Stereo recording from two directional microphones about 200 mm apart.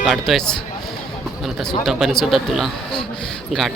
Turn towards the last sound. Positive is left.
turn(degrees=0)  # may be behind; listen again after turning